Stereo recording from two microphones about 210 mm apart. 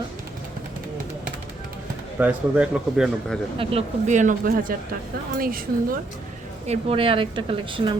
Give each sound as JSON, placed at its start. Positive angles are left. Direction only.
{"t": 2.1, "sound": "a man's voice", "side_deg": -5}
{"t": 3.6, "sound": "speech", "side_deg": -30}
{"t": 6.7, "sound": "speech", "side_deg": -25}